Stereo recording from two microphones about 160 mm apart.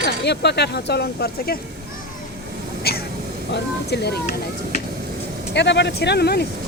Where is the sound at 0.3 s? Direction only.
90° left.